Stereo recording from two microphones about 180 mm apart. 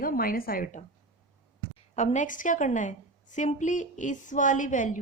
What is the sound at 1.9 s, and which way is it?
A woman's voice, 40° left (ahead or behind).